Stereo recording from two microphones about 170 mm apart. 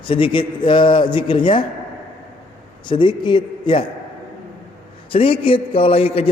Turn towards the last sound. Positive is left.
turn(degrees=35)  # may be behind; listen again after turning